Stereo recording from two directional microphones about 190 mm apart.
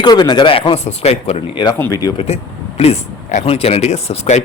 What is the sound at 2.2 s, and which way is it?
Speech, 35° left (ahead or behind).